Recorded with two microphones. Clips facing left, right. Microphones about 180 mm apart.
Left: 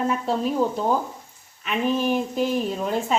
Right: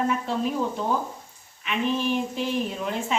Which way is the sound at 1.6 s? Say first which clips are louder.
Left 3 dB; 45° left (ahead or behind).